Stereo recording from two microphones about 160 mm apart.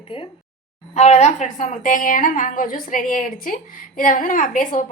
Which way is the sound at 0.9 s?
45° left (ahead or behind).